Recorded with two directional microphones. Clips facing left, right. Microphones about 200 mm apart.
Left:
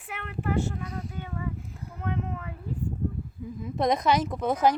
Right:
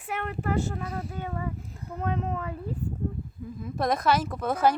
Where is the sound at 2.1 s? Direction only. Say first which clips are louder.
Right 3 dB; 40° right (ahead or behind).